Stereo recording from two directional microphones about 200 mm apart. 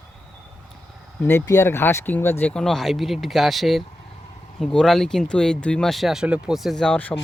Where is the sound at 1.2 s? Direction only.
15° left (ahead or behind).